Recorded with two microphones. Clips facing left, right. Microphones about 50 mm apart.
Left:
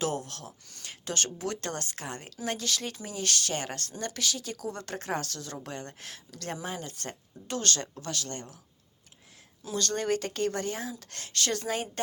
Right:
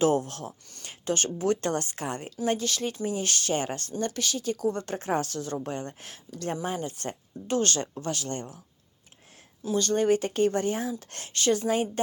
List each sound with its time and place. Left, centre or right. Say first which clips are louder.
0.0 s speech: right 8 dB; right
1.0 s speech: right 7 dB; centre
1.6 s speech: right 7 dB; right
2.4 s speech: right 5 dB; centre
4.9 s speech: right 5 dB; centre
6.7 s speech: right 6 dB; right
9.6 s speech: right 6 dB; centre; by 11.3 s right
11.3 s speech: right 6 dB; centre